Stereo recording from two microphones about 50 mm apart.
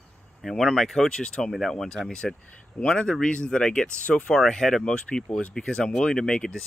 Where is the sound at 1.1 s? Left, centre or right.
Centre.